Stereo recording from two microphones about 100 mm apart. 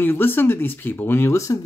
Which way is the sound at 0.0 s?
20° left (ahead or behind).